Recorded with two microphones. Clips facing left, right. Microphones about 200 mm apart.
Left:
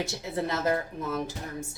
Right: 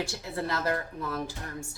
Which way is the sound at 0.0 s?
20° left (ahead or behind).